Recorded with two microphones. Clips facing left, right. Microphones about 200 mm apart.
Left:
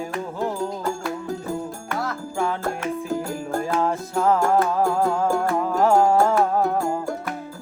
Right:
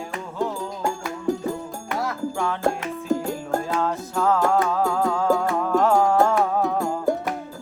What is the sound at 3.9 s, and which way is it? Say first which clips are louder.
Music: left 2 dB; 20° left (ahead or behind).